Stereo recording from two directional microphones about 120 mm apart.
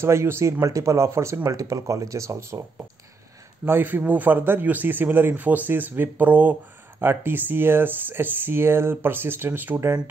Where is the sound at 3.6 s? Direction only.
15° right (ahead or behind).